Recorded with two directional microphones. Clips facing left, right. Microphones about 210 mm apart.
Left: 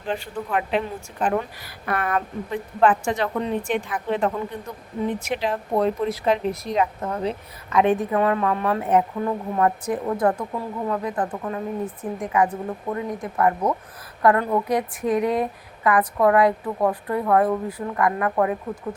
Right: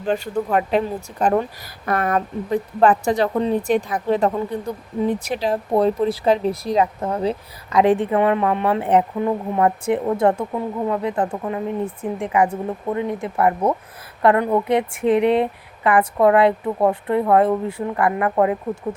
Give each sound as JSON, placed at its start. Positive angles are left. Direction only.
{"t": 0.0, "sound": "a woman's voice", "side_deg": -40}